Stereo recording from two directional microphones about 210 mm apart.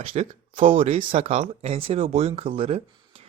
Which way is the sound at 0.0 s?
30° right (ahead or behind).